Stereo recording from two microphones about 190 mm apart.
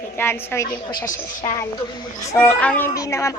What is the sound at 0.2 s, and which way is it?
Speech, 10° left (ahead or behind).